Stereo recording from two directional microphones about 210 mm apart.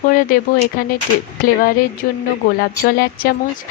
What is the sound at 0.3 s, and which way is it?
Speech, 40° left (ahead or behind).